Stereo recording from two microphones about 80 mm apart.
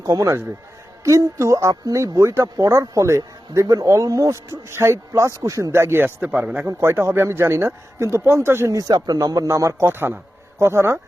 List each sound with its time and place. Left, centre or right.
1.0 s speech: right
4.4 s speech: right
5.7 s speech: right
6.7 s speech: right
8.9 s speech: right
9.5 s speech: right